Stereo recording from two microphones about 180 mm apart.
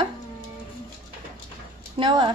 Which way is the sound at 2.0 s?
25° right (ahead or behind).